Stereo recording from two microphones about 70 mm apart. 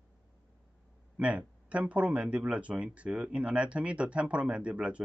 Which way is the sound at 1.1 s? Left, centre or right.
Centre.